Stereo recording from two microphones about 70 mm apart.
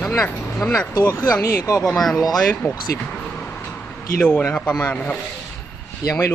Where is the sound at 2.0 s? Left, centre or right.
Centre.